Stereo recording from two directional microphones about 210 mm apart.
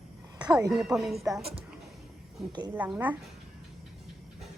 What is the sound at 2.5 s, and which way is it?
Speech, 20° right (ahead or behind).